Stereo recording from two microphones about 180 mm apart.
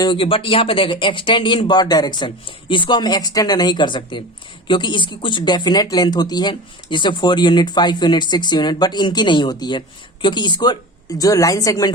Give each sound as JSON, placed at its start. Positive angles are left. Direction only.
{"t": 0.0, "sound": "speech", "side_deg": 30}